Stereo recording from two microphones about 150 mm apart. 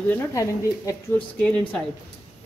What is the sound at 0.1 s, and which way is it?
Speech, 20° left (ahead or behind).